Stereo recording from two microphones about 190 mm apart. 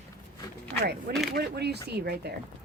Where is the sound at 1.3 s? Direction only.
60° right (ahead or behind).